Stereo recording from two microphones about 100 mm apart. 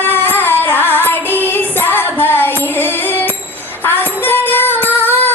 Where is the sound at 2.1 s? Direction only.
20° left (ahead or behind).